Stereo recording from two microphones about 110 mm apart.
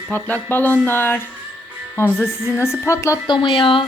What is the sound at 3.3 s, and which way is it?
Speech, 50° left (ahead or behind).